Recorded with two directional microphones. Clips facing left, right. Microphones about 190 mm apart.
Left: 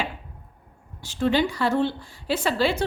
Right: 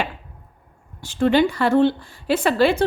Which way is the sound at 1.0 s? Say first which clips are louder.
Right 5 dB; 55° right (ahead or behind).